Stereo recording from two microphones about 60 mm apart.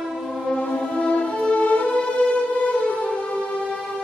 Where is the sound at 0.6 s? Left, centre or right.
Left.